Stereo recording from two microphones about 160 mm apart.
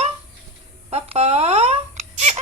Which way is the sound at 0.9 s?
40° right (ahead or behind).